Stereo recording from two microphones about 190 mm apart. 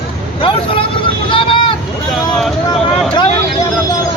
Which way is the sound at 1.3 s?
25° left (ahead or behind).